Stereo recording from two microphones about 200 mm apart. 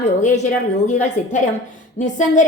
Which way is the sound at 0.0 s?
40° left (ahead or behind).